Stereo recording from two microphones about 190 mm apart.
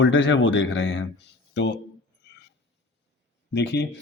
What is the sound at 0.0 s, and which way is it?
Speech, 80° left.